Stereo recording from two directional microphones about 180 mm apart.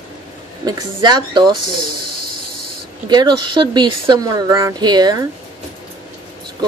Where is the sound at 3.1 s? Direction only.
25° right (ahead or behind).